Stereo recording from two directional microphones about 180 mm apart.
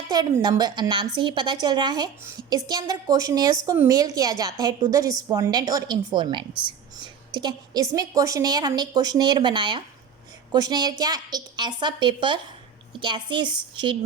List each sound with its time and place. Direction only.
0.1 s a woman's voice: 20° right (ahead or behind)